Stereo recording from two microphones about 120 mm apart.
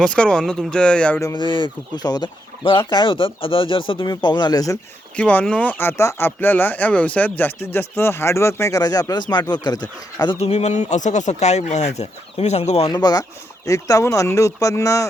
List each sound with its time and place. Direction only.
0.0 s speech: 5° left (ahead or behind)
1.2 s speech: 40° left (ahead or behind)
5.1 s speech: 10° left (ahead or behind); by 10.3 s 35° left (ahead or behind)
10.3 s speech: 65° left (ahead or behind)
12.9 s speech: 30° left (ahead or behind)